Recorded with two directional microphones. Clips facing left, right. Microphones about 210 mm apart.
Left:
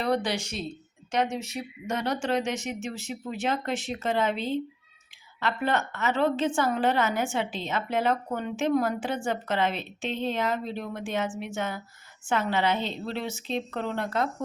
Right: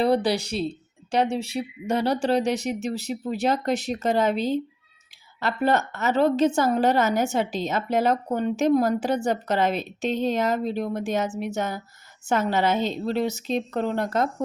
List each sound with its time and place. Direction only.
0.0 s a woman's voice: 35° right (ahead or behind)